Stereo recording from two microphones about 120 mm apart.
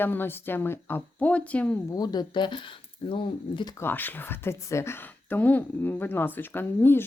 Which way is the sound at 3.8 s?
15° left (ahead or behind).